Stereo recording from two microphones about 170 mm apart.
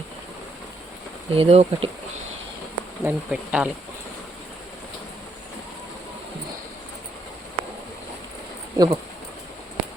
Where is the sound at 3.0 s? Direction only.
10° right (ahead or behind).